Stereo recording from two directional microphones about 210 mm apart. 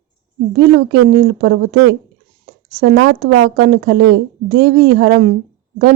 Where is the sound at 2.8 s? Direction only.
50° right (ahead or behind).